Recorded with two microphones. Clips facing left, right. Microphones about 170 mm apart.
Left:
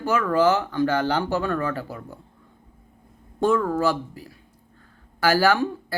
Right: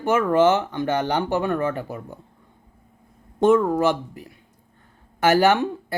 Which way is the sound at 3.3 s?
20° right (ahead or behind).